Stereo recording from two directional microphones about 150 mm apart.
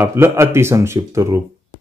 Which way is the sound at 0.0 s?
15° right (ahead or behind).